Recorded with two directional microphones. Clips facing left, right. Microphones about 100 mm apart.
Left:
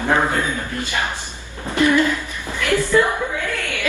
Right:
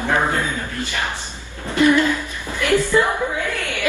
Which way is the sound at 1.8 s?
15° right (ahead or behind).